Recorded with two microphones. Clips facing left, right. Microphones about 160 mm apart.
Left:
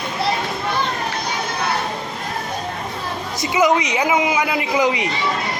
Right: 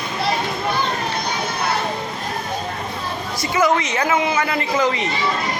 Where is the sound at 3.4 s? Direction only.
20° left (ahead or behind).